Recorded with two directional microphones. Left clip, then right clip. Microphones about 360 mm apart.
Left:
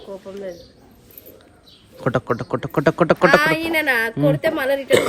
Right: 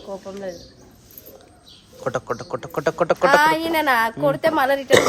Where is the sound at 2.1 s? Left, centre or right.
Centre.